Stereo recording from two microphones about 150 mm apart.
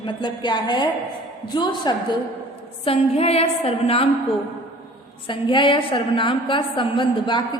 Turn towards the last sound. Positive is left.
turn(degrees=35)  # may be behind; listen again after turning